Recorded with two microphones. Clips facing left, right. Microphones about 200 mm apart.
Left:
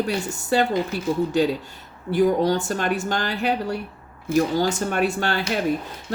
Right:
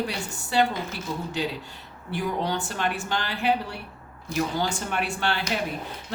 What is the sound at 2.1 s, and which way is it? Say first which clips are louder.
Speech: left 9 dB; 40° left (ahead or behind).